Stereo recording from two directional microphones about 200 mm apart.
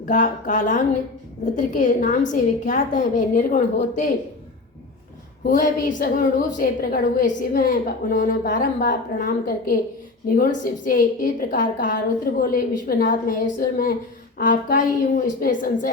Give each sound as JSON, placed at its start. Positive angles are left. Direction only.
{"t": 0.0, "sound": "a woman's voice", "side_deg": 40}
{"t": 5.5, "sound": "a woman's voice", "side_deg": 40}